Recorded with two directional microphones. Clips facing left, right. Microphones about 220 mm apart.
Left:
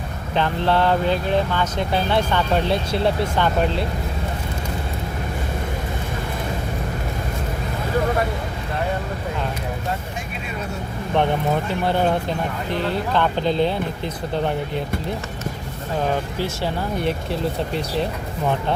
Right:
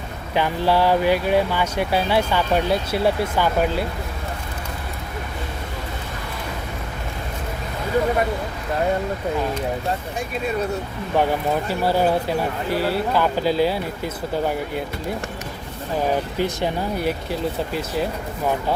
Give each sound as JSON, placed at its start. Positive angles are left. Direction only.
{"t": 0.3, "sound": "speech", "side_deg": -10}
{"t": 11.7, "sound": "speech", "side_deg": -5}
{"t": 16.4, "sound": "speech", "side_deg": -15}